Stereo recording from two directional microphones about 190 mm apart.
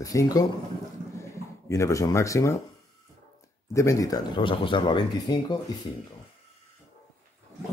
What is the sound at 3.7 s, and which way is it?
Speech, 15° left (ahead or behind).